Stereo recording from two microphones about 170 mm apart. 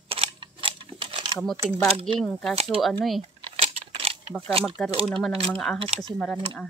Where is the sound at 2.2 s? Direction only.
5° left (ahead or behind).